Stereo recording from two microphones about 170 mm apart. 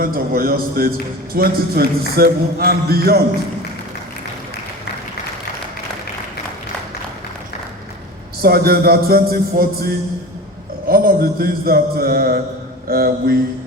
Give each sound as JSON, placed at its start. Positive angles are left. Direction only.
{"t": 0.0, "sound": "a man's voice", "side_deg": -60}
{"t": 8.4, "sound": "a man's voice", "side_deg": -65}